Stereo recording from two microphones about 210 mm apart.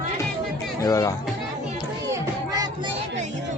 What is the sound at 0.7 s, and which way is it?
Speech, 15° left (ahead or behind).